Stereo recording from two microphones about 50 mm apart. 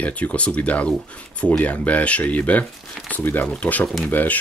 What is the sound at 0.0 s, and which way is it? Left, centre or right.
Speech, left.